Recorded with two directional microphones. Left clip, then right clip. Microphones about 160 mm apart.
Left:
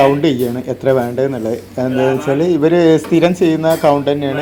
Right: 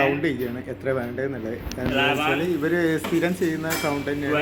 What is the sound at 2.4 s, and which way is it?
Speech, 20° left (ahead or behind).